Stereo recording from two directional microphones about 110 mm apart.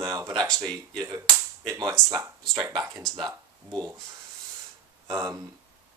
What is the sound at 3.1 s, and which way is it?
Speech, 40° right (ahead or behind).